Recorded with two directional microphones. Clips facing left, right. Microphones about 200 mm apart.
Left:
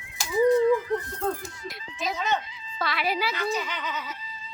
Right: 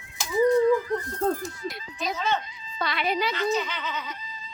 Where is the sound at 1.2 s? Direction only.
40° right (ahead or behind).